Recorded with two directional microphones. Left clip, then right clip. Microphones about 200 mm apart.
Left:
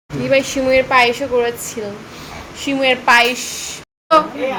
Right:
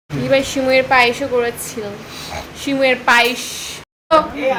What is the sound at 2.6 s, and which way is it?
A woman's voice, 5° left (ahead or behind).